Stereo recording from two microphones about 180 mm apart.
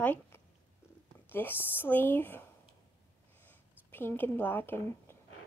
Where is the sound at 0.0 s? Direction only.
10° left (ahead or behind).